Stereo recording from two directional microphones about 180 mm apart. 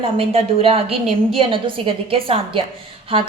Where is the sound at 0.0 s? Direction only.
30° right (ahead or behind).